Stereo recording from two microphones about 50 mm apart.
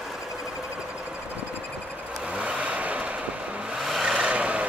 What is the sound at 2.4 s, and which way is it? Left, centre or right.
Vehicle, right.